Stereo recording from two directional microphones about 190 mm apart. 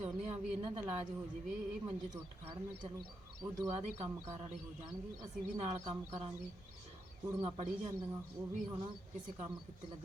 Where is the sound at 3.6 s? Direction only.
35° right (ahead or behind).